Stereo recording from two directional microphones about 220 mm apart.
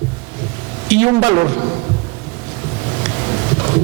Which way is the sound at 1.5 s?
25° right (ahead or behind).